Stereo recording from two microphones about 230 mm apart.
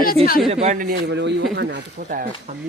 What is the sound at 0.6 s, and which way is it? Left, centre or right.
Speech, right.